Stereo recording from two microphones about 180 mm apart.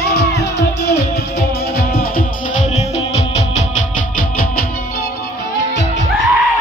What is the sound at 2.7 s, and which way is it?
Music, 35° left (ahead or behind).